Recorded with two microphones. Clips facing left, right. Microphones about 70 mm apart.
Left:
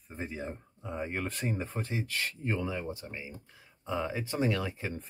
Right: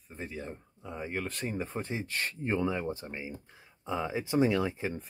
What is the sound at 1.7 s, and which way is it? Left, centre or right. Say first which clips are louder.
Speech: even; right.